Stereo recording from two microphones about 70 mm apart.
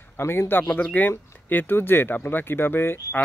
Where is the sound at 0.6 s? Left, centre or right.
Left.